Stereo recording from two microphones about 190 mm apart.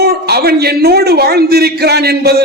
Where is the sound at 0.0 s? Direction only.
55° right (ahead or behind).